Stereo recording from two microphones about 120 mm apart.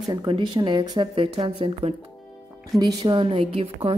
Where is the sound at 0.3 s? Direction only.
35° right (ahead or behind).